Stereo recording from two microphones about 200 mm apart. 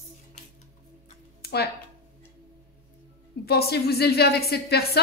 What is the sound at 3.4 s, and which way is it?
A woman's voice, 50° left (ahead or behind).